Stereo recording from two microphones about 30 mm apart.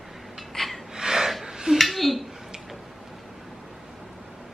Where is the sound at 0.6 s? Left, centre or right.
Centre.